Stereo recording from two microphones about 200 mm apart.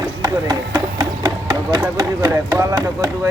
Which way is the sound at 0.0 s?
20° right (ahead or behind).